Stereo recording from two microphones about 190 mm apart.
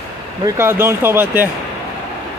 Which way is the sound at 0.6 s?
15° right (ahead or behind).